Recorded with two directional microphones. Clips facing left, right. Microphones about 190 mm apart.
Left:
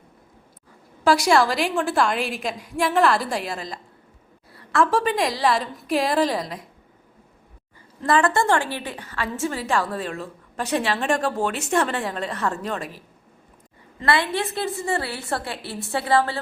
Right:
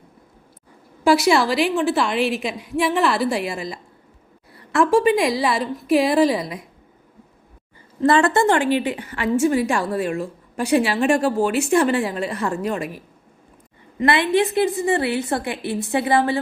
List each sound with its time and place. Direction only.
1.0 s a woman's voice: 5° right (ahead or behind)
8.0 s a woman's voice: 25° right (ahead or behind); by 13.0 s 10° right (ahead or behind)
14.0 s a woman's voice: 20° right (ahead or behind)